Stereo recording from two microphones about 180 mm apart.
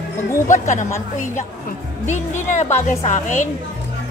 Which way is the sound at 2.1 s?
40° left (ahead or behind).